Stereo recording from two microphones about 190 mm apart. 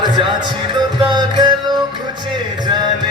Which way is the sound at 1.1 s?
25° right (ahead or behind).